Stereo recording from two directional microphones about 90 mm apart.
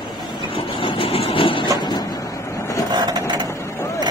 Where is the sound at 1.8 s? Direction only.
55° left (ahead or behind).